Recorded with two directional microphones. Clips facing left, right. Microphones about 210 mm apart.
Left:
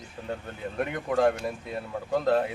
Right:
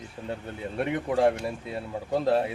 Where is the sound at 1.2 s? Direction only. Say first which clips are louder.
Even; 30° right (ahead or behind).